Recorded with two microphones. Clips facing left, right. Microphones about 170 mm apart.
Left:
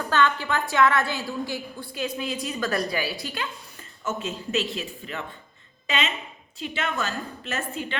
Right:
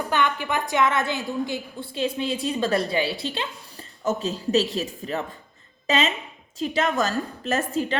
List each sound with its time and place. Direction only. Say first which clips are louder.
0.1 s a woman's voice: left 2 dB; 15° right (ahead or behind); by 7.9 s 40° right (ahead or behind)